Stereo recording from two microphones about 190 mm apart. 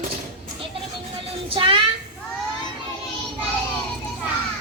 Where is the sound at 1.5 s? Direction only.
25° right (ahead or behind).